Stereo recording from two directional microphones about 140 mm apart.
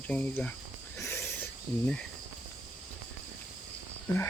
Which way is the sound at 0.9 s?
20° left (ahead or behind).